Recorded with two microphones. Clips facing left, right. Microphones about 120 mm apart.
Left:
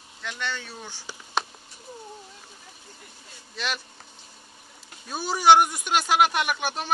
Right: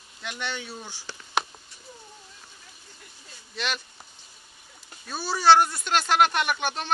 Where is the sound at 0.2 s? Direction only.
15° right (ahead or behind).